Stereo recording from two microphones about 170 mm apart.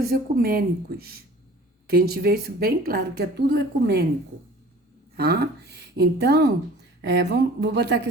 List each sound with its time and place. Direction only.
0.0 s a woman's voice: 65° right (ahead or behind)
5.1 s a woman's voice: 70° right (ahead or behind)